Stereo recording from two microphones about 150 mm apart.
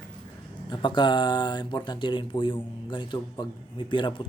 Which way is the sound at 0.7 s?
30° left (ahead or behind).